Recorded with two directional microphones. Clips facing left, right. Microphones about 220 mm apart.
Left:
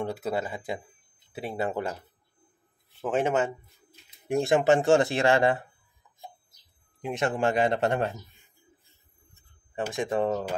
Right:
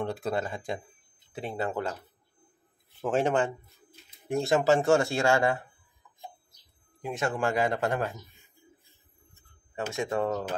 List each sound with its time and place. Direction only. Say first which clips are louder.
0.0 s speech: left 1 dB; 5° left (ahead or behind)
3.0 s speech: even; centre (ahead or behind)
4.3 s speech: left 2 dB; 15° left (ahead or behind)
7.0 s a man's voice: left 2 dB; 20° left (ahead or behind)
9.8 s speech: left 2 dB; 15° left (ahead or behind)